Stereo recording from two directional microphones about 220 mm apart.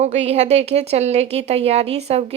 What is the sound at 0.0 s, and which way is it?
A woman's voice, 30° right (ahead or behind).